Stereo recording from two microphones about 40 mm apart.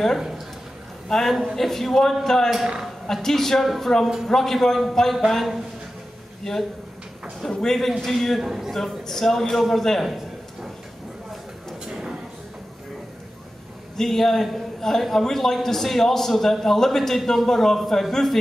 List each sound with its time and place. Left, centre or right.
1.0 s a man's voice: centre
7.6 s a man's voice: centre
8.4 s a man's voice: centre
8.7 s a man's voice: centre
10.0 s a sound: centre
11.8 s a sound: centre
13.9 s a man's voice: centre